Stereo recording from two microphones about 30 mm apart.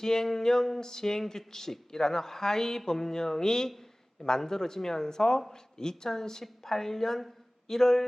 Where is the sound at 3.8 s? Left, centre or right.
Left.